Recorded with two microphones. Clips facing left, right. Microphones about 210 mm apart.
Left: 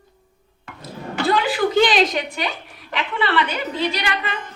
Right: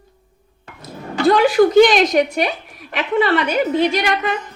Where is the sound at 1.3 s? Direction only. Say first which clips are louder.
Right 8 dB; 45° right (ahead or behind).